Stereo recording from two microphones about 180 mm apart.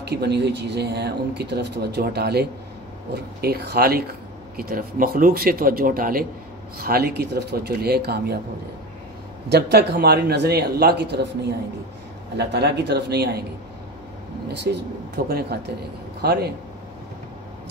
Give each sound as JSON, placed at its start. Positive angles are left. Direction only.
{"t": 0.0, "sound": "a man's voice", "side_deg": -65}
{"t": 9.5, "sound": "a man's voice", "side_deg": -65}
{"t": 12.4, "sound": "speech", "side_deg": -70}
{"t": 14.5, "sound": "a man's voice", "side_deg": -70}